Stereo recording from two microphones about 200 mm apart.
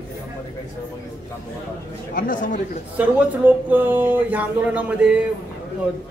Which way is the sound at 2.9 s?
10° right (ahead or behind).